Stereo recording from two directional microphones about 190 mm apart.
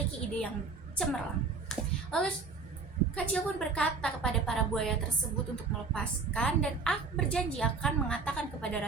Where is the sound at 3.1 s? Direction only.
5° left (ahead or behind).